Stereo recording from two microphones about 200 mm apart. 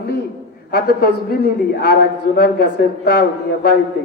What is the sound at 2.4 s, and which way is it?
Speech, 50° left (ahead or behind).